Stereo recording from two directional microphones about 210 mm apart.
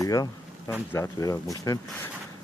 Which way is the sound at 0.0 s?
15° left (ahead or behind).